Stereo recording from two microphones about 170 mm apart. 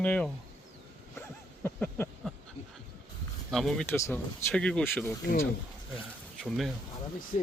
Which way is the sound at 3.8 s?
10° left (ahead or behind).